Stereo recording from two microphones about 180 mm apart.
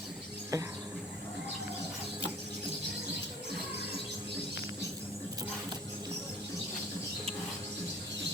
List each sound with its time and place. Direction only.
0.5 s music: 20° right (ahead or behind)